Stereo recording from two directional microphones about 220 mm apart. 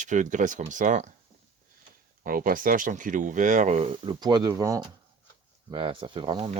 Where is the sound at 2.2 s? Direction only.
40° right (ahead or behind).